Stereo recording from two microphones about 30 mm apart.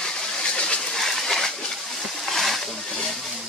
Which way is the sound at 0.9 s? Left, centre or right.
Centre.